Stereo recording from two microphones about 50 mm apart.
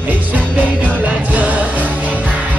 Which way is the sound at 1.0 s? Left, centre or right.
Right.